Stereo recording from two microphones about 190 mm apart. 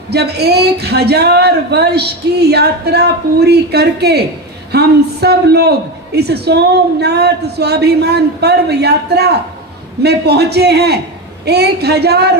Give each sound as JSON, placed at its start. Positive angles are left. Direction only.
{"t": 0.1, "sound": "speech", "side_deg": -60}